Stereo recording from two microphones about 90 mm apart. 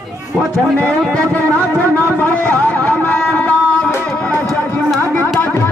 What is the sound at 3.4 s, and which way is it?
Music, 10° left (ahead or behind).